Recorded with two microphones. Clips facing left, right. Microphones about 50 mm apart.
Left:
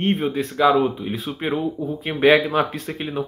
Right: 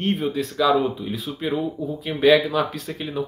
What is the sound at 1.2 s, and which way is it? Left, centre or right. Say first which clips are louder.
Speech: left 1 dB; left.